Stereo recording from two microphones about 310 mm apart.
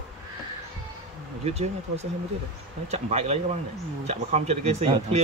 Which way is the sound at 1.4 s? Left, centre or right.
Right.